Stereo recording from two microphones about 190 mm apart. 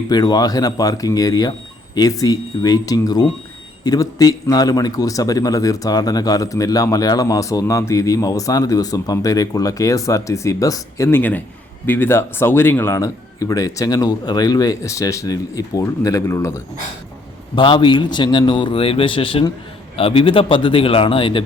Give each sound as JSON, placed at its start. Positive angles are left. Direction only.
{"t": 0.1, "sound": "a man's voice", "side_deg": 20}
{"t": 17.5, "sound": "a man's voice", "side_deg": 25}